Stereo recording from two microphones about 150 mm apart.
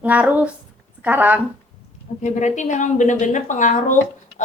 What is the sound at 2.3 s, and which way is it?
Speech, 50° left (ahead or behind).